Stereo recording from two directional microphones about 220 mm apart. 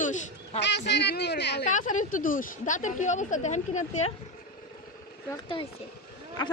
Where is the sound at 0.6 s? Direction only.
50° left (ahead or behind).